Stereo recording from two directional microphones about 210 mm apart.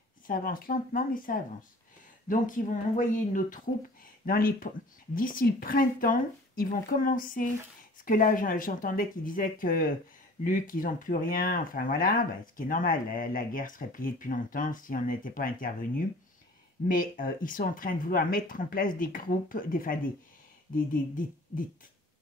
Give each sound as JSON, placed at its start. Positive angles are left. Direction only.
{"t": 0.3, "sound": "speech", "side_deg": 40}
{"t": 16.8, "sound": "speech", "side_deg": 40}